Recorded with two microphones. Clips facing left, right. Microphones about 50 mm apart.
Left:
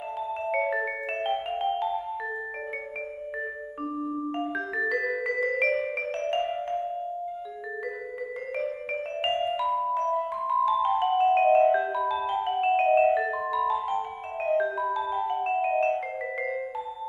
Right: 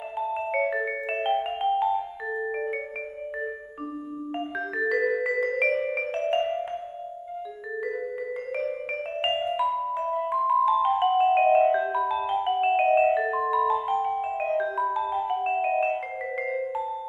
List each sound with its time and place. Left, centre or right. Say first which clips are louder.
0.2 s music: right 2 dB; centre
4.3 s music: left 1 dB; centre
8.5 s music: even; centre
10.2 s marimba: right 5 dB; centre
10.7 s music: right 2 dB; centre
14.1 s music: right 1 dB; centre